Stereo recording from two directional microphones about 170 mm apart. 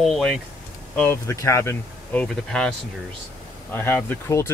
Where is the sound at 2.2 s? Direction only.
5° left (ahead or behind).